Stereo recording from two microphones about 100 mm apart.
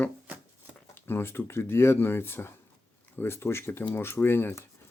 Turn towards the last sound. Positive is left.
turn(degrees=20)  # may be behind; listen again after turning